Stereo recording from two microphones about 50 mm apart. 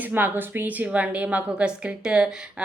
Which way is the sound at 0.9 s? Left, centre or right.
Right.